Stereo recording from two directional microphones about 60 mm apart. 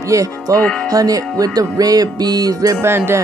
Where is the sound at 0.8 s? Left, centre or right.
Right.